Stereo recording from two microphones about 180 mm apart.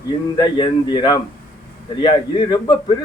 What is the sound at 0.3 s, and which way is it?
Speech, 25° left (ahead or behind).